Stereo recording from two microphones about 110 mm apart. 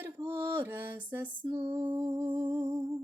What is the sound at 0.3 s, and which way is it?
Mantra, 20° right (ahead or behind).